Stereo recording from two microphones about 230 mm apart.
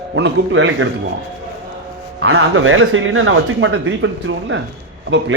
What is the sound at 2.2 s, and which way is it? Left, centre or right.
Speech, right.